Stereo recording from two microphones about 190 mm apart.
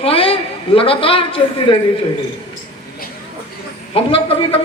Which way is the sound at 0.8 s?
30° left (ahead or behind).